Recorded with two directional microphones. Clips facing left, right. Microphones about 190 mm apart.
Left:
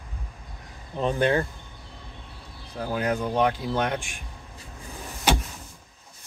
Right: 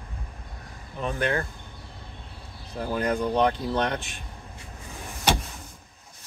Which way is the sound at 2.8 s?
5° left (ahead or behind).